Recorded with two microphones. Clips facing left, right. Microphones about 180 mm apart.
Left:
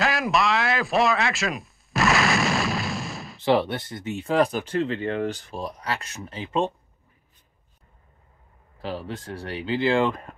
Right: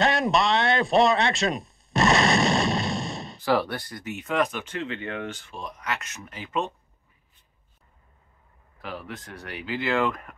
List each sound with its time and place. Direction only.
0.0 s a sound: centre (ahead or behind)
3.3 s speech: 20° left (ahead or behind)
8.8 s speech: 30° left (ahead or behind)